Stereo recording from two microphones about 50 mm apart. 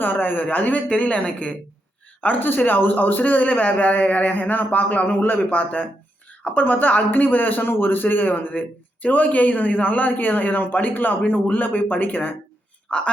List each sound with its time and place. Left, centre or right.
0.0 s a woman's voice: left
2.2 s speech: left
12.9 s speech: left